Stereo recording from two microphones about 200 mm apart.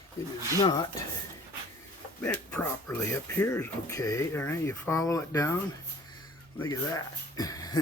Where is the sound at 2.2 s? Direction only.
10° left (ahead or behind).